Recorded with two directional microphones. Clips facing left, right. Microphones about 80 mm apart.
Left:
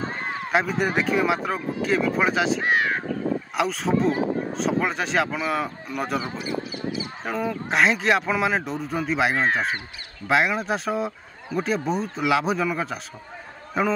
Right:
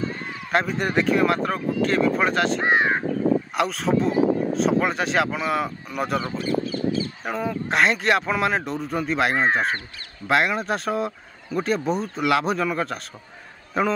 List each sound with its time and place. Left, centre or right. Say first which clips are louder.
0.0 s a sound: left 1 dB; left
0.5 s speech: even; centre
2.6 s crow: right 2 dB; right
3.5 s speech: right 1 dB; centre
7.2 s speech: left 3 dB; centre